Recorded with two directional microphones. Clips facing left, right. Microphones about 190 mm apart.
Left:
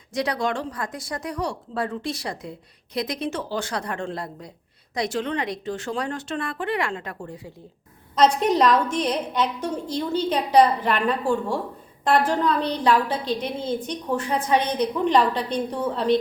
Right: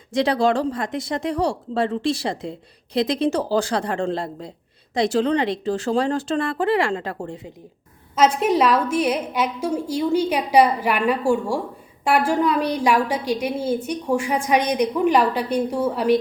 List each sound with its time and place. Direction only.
0.1 s a woman's voice: 30° right (ahead or behind)
8.1 s a woman's voice: 5° right (ahead or behind)